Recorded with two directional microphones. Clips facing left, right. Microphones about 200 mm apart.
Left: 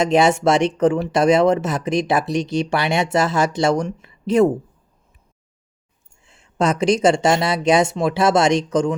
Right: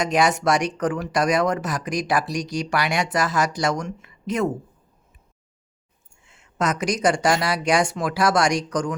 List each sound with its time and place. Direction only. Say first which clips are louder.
0.0 s speech: left 5 dB; 25° left (ahead or behind)
6.2 s speech: left 5 dB; 30° left (ahead or behind)